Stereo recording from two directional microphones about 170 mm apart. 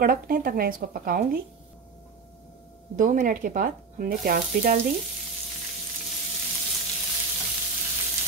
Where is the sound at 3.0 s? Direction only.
50° right (ahead or behind).